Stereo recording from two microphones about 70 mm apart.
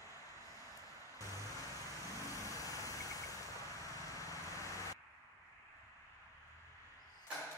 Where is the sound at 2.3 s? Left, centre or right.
Left.